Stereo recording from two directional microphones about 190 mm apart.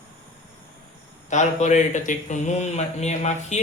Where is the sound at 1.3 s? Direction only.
40° left (ahead or behind).